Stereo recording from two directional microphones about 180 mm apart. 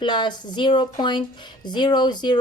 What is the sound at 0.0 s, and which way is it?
Speech, 25° left (ahead or behind).